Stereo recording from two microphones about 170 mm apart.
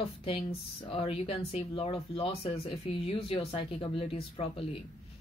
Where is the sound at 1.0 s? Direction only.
35° left (ahead or behind).